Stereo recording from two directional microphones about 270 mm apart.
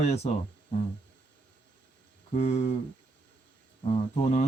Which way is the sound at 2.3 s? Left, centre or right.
Left.